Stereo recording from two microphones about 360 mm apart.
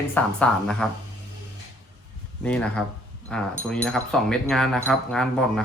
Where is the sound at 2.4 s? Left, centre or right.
Centre.